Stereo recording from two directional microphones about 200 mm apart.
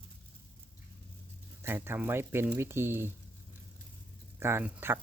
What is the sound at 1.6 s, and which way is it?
Speech, 10° right (ahead or behind).